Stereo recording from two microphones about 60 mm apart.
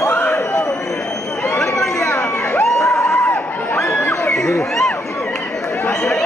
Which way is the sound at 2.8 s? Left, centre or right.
Left.